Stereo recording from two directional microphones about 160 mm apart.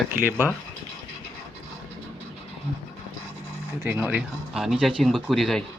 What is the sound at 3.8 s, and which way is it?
Speech, 10° right (ahead or behind).